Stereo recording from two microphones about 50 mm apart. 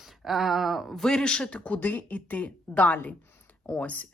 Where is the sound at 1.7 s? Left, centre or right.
Left.